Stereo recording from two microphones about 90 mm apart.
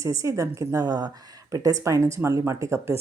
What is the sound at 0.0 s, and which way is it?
A woman's voice, 35° right (ahead or behind).